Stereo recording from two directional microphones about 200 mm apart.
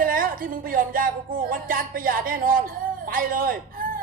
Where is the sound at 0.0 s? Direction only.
45° right (ahead or behind).